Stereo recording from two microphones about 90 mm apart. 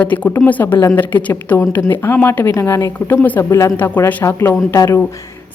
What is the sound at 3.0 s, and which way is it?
Speech, 20° left (ahead or behind).